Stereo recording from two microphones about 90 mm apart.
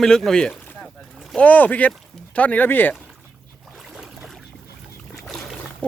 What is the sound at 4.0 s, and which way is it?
Boat, centre (ahead or behind).